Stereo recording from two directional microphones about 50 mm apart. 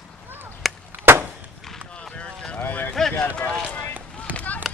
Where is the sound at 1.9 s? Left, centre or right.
Left.